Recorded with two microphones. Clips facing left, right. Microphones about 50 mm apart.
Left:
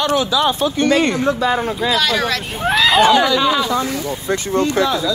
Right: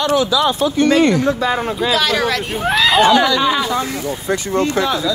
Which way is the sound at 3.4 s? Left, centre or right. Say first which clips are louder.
Even; centre.